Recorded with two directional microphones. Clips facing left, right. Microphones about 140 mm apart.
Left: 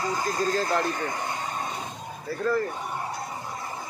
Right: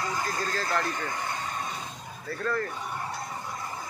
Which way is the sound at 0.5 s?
15° left (ahead or behind).